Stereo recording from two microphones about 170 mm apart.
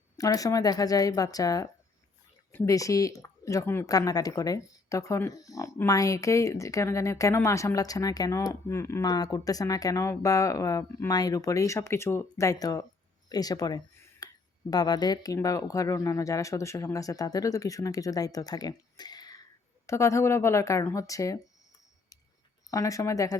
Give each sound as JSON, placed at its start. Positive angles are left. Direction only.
{"t": 0.2, "sound": "speech", "side_deg": 20}
{"t": 13.2, "sound": "a sound", "side_deg": 20}
{"t": 14.7, "sound": "a woman's voice", "side_deg": 25}
{"t": 22.7, "sound": "speech", "side_deg": 20}